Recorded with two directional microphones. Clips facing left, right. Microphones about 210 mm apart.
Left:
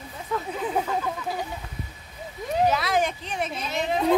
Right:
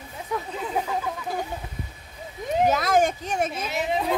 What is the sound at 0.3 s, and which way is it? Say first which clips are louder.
Chatter: even; 15° right (ahead or behind).